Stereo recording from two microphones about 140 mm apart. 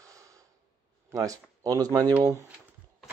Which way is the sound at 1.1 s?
25° right (ahead or behind).